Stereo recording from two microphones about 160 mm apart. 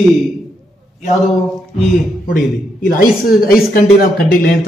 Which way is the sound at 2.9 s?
65° left (ahead or behind).